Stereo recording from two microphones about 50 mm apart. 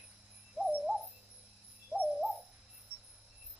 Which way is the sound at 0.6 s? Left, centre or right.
Right.